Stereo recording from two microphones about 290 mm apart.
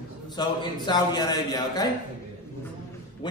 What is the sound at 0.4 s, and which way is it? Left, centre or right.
A man's voice, centre.